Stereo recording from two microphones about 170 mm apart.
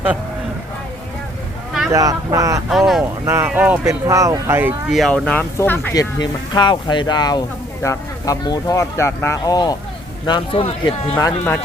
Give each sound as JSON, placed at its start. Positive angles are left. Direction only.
{"t": 1.9, "sound": "speech", "side_deg": -20}
{"t": 2.6, "sound": "speech", "side_deg": 0}
{"t": 3.2, "sound": "speech", "side_deg": -15}
{"t": 4.9, "sound": "speech", "side_deg": 0}
{"t": 5.9, "sound": "speech", "side_deg": 20}